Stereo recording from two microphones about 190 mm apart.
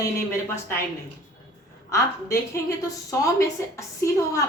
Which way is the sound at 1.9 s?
15° left (ahead or behind).